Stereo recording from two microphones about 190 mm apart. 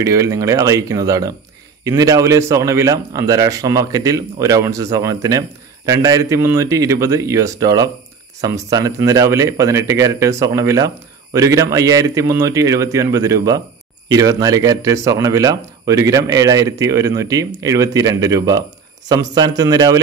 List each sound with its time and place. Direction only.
0.0 s a man's voice: 15° right (ahead or behind)